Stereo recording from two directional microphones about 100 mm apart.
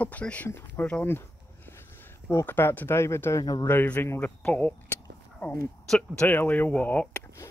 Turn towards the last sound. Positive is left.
turn(degrees=15)  # may be behind; listen again after turning